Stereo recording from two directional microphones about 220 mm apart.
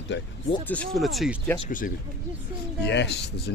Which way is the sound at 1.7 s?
40° left (ahead or behind).